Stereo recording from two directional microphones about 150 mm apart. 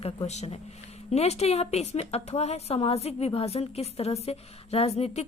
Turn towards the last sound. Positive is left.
turn(degrees=45)  # may be behind; listen again after turning